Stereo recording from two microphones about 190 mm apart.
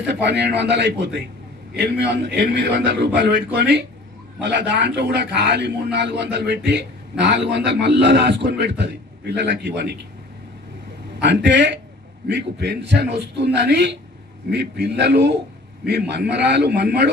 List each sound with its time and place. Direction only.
0.1 s a man's voice: 65° right (ahead or behind)
11.1 s a man's voice: 70° right (ahead or behind)